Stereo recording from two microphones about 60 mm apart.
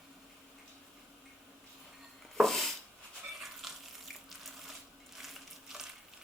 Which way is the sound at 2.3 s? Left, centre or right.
Centre.